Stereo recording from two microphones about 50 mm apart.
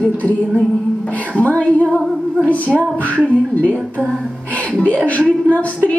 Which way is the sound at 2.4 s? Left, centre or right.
Left.